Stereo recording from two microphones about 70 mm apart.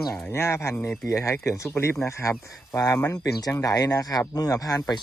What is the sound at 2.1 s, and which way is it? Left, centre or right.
Speech, left.